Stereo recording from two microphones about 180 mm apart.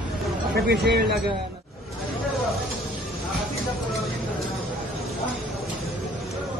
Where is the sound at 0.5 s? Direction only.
65° right (ahead or behind).